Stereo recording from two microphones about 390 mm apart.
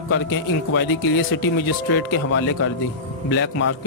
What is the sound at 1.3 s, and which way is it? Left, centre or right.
Speech, left.